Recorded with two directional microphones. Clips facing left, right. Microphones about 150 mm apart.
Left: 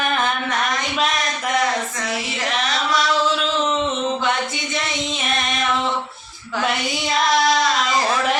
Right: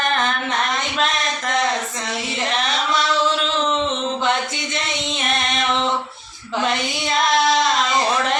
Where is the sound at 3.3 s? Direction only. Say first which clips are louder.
Even; 5° left (ahead or behind).